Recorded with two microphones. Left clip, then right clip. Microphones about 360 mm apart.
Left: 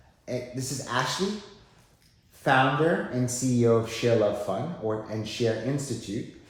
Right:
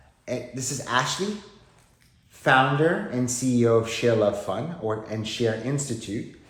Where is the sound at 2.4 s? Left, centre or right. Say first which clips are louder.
Right 3 dB; right.